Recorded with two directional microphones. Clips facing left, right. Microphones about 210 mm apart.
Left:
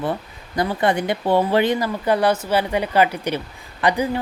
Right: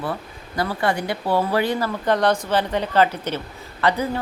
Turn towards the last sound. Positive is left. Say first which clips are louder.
# left 1 dB
turn(degrees=15)  # may be behind; listen again after turning